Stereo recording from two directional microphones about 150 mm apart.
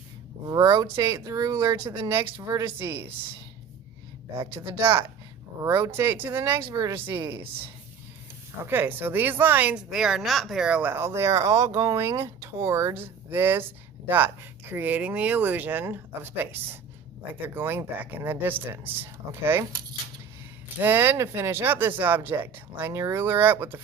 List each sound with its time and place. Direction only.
0.4 s a woman's voice: 25° right (ahead or behind)
4.4 s speech: 35° right (ahead or behind)
4.8 s a woman's voice: 15° right (ahead or behind)
8.6 s a woman's voice: 15° right (ahead or behind)
20.8 s a woman's voice: 15° right (ahead or behind)